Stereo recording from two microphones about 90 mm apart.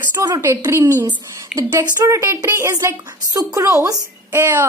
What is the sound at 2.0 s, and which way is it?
A woman's voice, 35° right (ahead or behind).